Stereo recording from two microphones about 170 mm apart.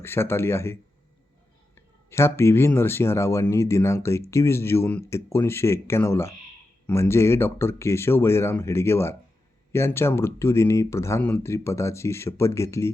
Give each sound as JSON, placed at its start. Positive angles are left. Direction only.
{"t": 0.0, "sound": "speech", "side_deg": 15}
{"t": 2.0, "sound": "speech", "side_deg": 15}